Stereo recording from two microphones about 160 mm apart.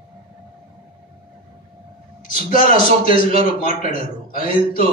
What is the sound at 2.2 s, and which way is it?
Speech, 60° left (ahead or behind).